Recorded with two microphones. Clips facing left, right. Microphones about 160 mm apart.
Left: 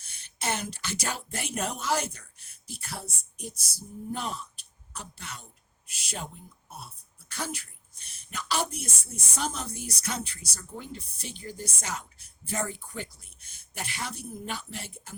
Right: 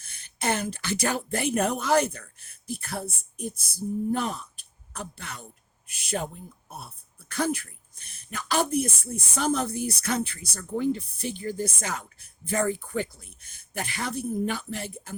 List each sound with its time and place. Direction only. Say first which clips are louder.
0.2 s speech: right 5 dB; 55° right (ahead or behind)